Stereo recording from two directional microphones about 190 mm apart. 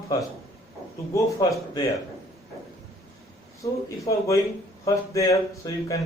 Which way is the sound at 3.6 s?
15° left (ahead or behind).